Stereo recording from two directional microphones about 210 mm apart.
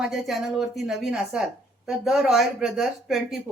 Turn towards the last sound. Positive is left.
turn(degrees=0)  # may be behind; listen again after turning